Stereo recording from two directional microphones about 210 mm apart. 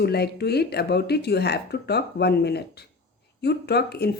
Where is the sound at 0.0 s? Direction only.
50° left (ahead or behind).